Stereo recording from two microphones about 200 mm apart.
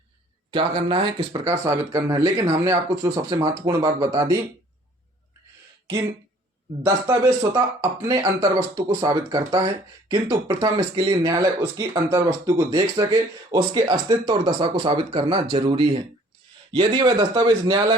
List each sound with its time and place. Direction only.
0.5 s speech: 25° right (ahead or behind)
6.8 s speech: 20° right (ahead or behind)